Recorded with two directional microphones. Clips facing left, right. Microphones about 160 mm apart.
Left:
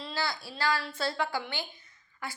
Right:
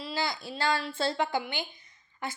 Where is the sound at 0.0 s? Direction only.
15° right (ahead or behind).